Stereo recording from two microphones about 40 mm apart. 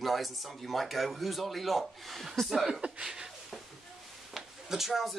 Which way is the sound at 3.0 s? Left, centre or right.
Centre.